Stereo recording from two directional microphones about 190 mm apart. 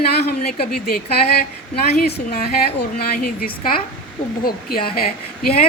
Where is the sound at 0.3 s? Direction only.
55° left (ahead or behind).